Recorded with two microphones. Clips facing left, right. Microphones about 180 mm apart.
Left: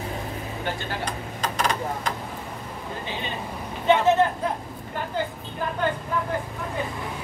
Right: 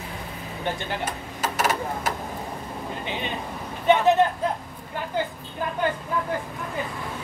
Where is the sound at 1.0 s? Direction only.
5° right (ahead or behind).